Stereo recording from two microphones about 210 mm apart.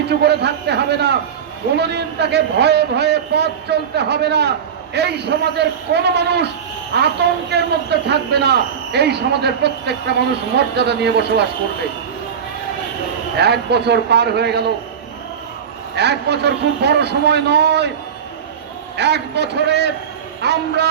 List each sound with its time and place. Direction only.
0.1 s a man's voice: 50° right (ahead or behind)
13.3 s a man's voice: 50° right (ahead or behind)
16.0 s a man's voice: 55° right (ahead or behind)
18.9 s a man's voice: 55° right (ahead or behind)